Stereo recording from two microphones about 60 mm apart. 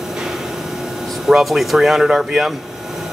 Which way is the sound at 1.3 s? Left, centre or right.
Centre.